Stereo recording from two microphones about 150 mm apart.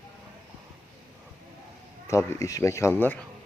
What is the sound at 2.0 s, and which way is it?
Speech, 20° left (ahead or behind).